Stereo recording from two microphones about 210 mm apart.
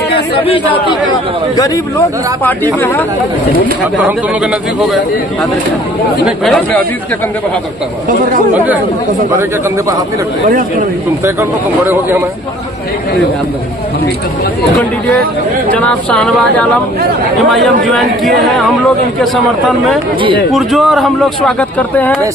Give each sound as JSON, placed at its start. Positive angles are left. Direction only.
{"t": 0.4, "sound": "speech", "side_deg": 25}
{"t": 1.6, "sound": "speech", "side_deg": 15}
{"t": 3.9, "sound": "a man's voice", "side_deg": -5}
{"t": 6.2, "sound": "a man's voice", "side_deg": 0}
{"t": 9.3, "sound": "speech", "side_deg": -15}
{"t": 11.2, "sound": "speech", "side_deg": -10}
{"t": 15.7, "sound": "a man's voice", "side_deg": 5}
{"t": 20.5, "sound": "a man's voice", "side_deg": 0}